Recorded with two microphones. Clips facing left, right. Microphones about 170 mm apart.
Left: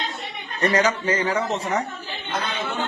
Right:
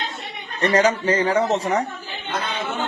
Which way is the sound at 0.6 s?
30° right (ahead or behind).